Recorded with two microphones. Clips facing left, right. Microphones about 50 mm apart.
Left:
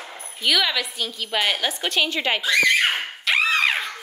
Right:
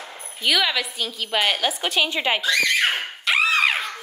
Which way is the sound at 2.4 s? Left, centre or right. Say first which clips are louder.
Left 4 dB; centre.